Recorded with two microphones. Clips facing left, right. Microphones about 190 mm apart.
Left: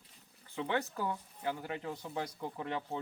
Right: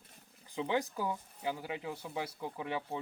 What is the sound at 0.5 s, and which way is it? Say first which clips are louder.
Speech: right 1 dB; 15° right (ahead or behind).